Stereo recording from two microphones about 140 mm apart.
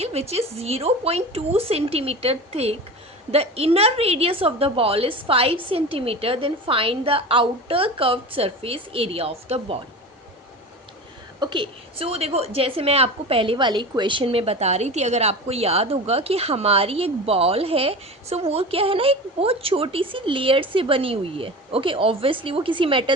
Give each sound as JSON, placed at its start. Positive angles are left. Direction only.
{"t": 0.0, "sound": "a woman's voice", "side_deg": -50}
{"t": 11.3, "sound": "a woman's voice", "side_deg": -35}